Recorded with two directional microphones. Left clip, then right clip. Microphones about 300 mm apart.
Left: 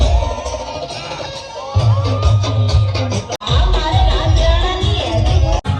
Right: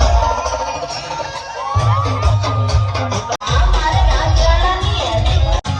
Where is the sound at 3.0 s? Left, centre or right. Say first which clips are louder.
Right 4 dB; centre.